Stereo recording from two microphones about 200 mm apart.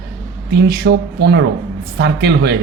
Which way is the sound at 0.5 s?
50° right (ahead or behind).